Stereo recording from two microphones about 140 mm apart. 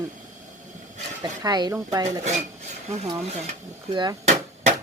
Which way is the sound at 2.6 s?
50° right (ahead or behind).